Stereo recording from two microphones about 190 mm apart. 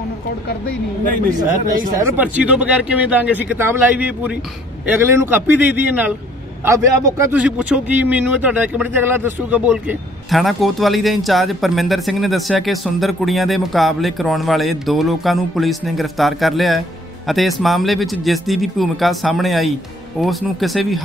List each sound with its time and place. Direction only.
2.0 s a man's voice: 10° right (ahead or behind)